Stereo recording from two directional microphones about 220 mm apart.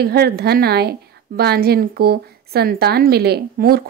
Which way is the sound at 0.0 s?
45° right (ahead or behind).